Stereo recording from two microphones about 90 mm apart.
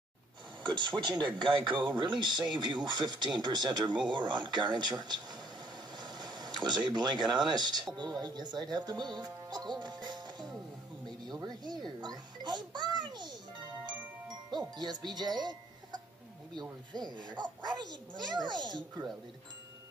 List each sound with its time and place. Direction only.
0.7 s a child's voice: 60° right (ahead or behind)
11.2 s music: 50° right (ahead or behind)
13.8 s chime: 50° right (ahead or behind)
16.9 s a child's voice: 55° right (ahead or behind)